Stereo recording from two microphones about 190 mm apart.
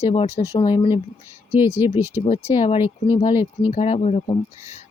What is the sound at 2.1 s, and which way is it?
Speech, 35° left (ahead or behind).